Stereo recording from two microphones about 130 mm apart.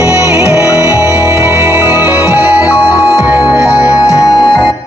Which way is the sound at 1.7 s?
20° right (ahead or behind).